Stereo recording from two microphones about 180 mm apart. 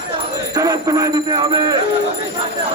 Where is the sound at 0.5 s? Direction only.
20° right (ahead or behind).